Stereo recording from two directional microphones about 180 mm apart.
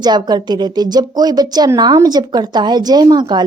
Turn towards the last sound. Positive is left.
turn(degrees=-25)  # may be behind; listen again after turning